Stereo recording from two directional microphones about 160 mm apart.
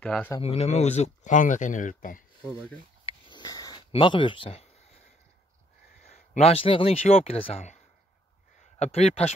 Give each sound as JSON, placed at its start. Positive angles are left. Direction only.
{"t": 0.0, "sound": "speech", "side_deg": 5}
{"t": 0.4, "sound": "speech", "side_deg": 40}
{"t": 3.1, "sound": "sniff", "side_deg": 30}
{"t": 3.9, "sound": "speech", "side_deg": 30}
{"t": 6.0, "sound": "speech", "side_deg": 45}